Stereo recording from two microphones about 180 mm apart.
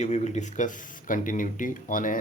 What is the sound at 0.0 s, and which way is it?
Speech, 40° left (ahead or behind).